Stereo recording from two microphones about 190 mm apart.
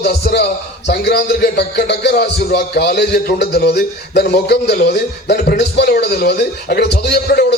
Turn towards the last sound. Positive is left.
turn(degrees=60)  # may be behind; listen again after turning